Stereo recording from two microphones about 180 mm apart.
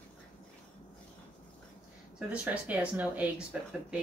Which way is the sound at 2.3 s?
10° right (ahead or behind).